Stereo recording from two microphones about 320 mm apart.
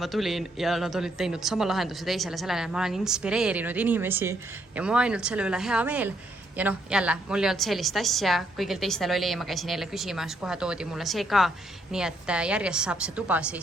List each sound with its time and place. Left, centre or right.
0.0 s a woman's voice: centre